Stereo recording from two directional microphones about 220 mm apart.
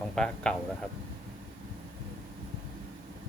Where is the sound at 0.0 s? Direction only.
5° left (ahead or behind).